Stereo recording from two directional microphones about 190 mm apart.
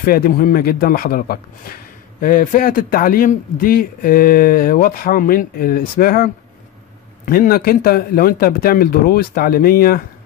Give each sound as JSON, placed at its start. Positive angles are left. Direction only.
{"t": 0.0, "sound": "a man's voice", "side_deg": 50}